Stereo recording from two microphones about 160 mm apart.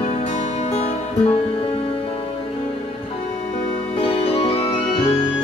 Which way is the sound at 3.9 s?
35° left (ahead or behind).